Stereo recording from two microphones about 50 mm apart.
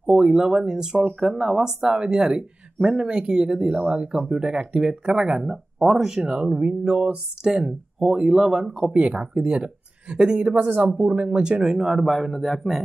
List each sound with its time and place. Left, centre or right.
0.0 s speech: centre